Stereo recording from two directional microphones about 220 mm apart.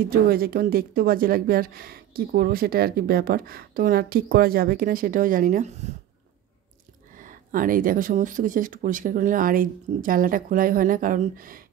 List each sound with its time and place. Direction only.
0.0 s speech: 45° right (ahead or behind)
7.2 s speech: 40° right (ahead or behind)